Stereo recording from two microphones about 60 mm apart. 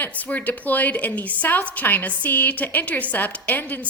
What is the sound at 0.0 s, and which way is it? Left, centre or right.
A woman's voice, left.